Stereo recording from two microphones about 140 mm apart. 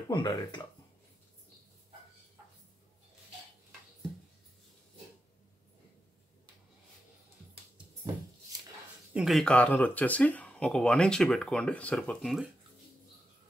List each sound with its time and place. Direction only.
0.1 s speech: 30° left (ahead or behind)
9.1 s speech: centre (ahead or behind)